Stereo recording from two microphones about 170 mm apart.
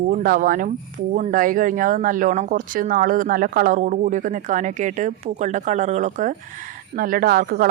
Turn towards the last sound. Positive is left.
turn(degrees=-55)  # may be behind; listen again after turning